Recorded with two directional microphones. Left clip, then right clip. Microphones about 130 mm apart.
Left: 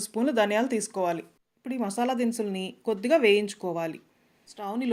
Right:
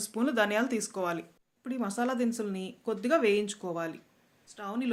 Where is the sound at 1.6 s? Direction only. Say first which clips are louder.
Left 4 dB; 40° left (ahead or behind).